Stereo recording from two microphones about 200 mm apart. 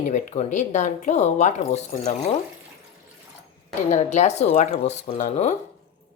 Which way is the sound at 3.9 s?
35° left (ahead or behind).